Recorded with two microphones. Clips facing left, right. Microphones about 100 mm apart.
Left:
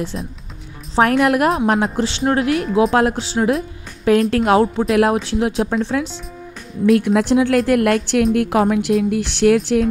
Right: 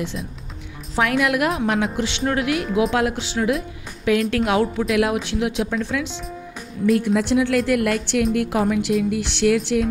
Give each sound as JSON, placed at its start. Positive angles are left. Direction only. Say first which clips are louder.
{"t": 0.9, "sound": "speech", "louder": "left 5 dB", "side_deg": 40}
{"t": 7.2, "sound": "a woman's voice", "louder": "left 4 dB", "side_deg": 45}